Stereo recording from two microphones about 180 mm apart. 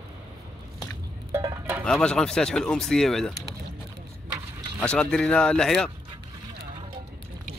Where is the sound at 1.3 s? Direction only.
15° right (ahead or behind).